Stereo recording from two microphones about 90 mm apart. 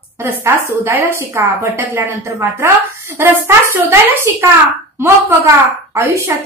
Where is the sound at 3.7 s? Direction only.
25° right (ahead or behind).